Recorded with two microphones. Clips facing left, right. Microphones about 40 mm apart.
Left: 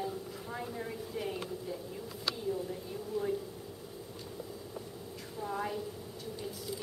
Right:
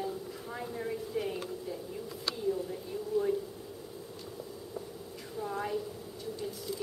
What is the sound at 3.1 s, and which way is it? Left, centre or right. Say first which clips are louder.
Speech: right 5 dB; centre.